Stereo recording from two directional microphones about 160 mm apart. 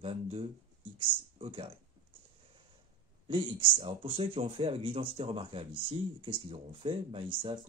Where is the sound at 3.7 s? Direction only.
35° right (ahead or behind).